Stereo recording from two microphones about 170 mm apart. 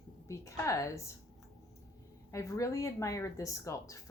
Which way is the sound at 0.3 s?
15° left (ahead or behind).